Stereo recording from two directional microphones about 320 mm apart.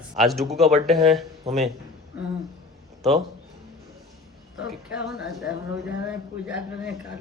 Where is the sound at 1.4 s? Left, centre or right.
Right.